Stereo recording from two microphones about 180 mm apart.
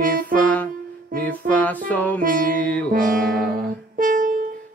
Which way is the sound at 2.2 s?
50° right (ahead or behind).